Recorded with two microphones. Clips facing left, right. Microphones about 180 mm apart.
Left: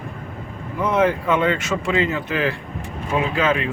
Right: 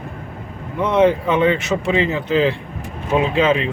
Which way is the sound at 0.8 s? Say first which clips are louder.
Right 4 dB; 25° right (ahead or behind).